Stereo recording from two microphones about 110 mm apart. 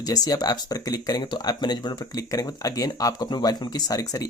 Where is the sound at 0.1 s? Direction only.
35° left (ahead or behind).